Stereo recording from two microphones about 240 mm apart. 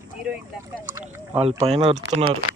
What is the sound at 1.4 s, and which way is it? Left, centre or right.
Speech, right.